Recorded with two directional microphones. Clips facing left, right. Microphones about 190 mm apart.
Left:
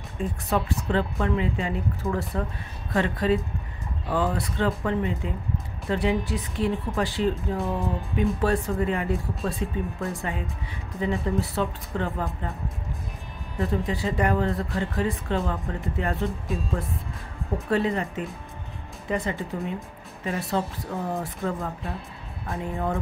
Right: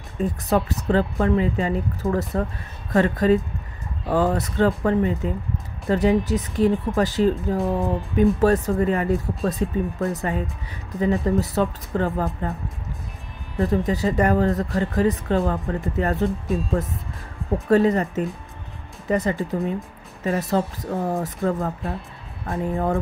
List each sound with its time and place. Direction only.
0.2 s speech: 40° right (ahead or behind)
13.6 s speech: 40° right (ahead or behind)
17.6 s speech: 40° right (ahead or behind)